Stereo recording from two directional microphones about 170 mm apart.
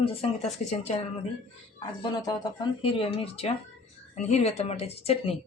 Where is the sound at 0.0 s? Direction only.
35° left (ahead or behind).